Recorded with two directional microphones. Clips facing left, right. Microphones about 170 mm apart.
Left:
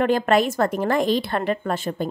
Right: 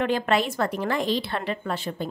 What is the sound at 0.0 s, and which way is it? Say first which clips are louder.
A woman's voice: left 5 dB; 45° left (ahead or behind).